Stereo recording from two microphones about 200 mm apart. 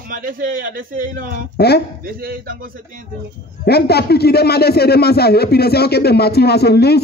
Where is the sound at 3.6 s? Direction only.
55° left (ahead or behind).